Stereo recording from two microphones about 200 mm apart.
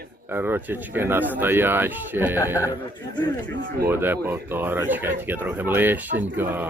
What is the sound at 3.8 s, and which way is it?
Speech, 10° right (ahead or behind).